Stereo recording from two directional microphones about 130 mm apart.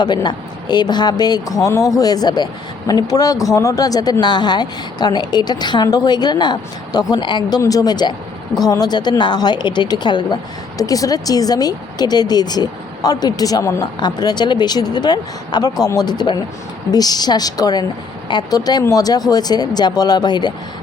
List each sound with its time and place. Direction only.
0.0 s a man's voice: 35° left (ahead or behind)